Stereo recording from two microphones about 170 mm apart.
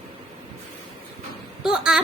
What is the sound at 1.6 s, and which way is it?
Speech, 5° right (ahead or behind).